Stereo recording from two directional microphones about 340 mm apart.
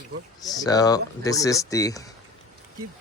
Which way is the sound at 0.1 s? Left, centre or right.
Right.